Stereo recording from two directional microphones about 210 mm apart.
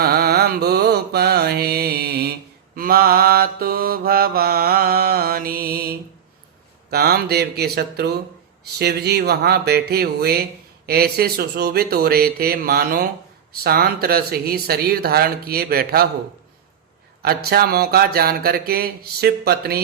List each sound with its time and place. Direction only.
0.0 s mantra: 50° right (ahead or behind)
6.9 s speech: 50° right (ahead or behind)
17.2 s speech: 45° right (ahead or behind)